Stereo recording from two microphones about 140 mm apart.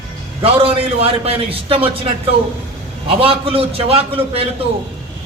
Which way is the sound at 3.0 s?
40° right (ahead or behind).